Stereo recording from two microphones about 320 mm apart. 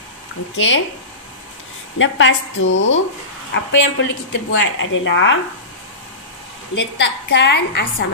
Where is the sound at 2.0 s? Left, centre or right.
Left.